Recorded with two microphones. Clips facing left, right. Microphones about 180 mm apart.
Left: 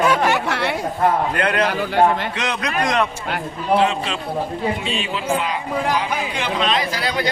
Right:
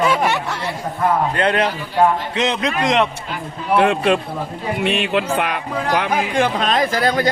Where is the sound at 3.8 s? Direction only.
60° right (ahead or behind).